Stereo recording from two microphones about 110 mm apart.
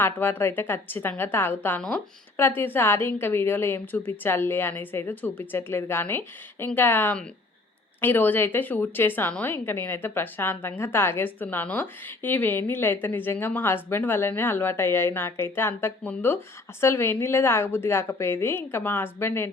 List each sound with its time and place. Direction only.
0.0 s a woman's voice: 20° left (ahead or behind)